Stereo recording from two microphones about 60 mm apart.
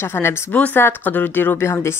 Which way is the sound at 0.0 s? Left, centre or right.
Left.